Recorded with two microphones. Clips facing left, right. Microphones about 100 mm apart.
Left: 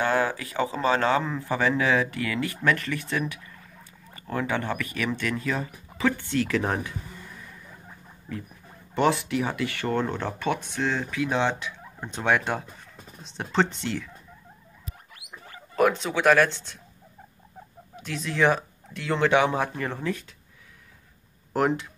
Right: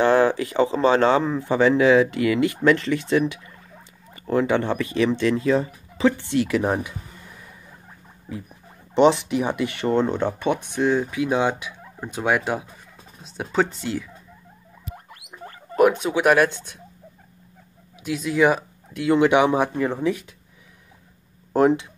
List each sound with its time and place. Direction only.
0.0 s speech: 30° right (ahead or behind)
8.3 s speech: 15° right (ahead or behind)
15.8 s speech: 15° right (ahead or behind)
18.0 s speech: 10° right (ahead or behind)
21.5 s speech: 20° right (ahead or behind)